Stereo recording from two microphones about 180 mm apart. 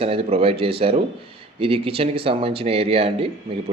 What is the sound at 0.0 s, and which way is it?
Speech, 30° right (ahead or behind).